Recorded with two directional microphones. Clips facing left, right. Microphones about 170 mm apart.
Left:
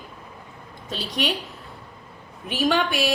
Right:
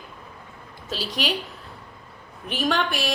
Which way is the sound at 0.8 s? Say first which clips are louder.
Left 1 dB; centre (ahead or behind).